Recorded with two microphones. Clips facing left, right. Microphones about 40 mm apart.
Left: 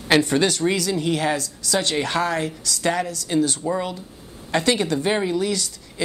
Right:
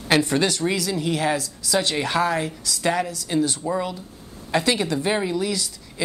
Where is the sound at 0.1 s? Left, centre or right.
Centre.